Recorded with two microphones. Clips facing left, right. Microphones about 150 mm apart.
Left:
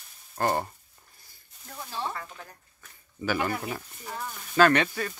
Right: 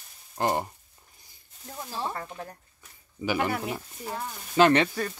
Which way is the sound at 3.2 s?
15° right (ahead or behind).